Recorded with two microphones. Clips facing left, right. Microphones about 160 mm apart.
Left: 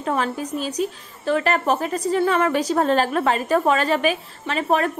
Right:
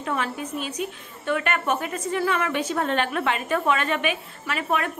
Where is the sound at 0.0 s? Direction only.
35° left (ahead or behind).